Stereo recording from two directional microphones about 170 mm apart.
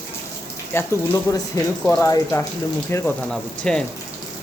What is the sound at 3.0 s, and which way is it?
Speech, 5° left (ahead or behind).